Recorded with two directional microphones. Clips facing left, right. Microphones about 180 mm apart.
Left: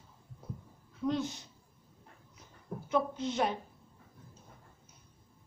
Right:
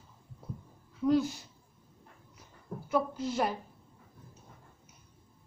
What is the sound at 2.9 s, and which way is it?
Speech, 5° right (ahead or behind).